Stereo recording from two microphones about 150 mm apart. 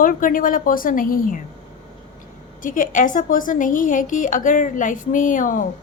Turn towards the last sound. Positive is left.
turn(degrees=60)  # may be behind; listen again after turning